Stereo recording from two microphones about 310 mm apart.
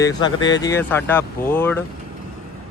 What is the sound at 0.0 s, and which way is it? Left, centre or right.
Speech, centre.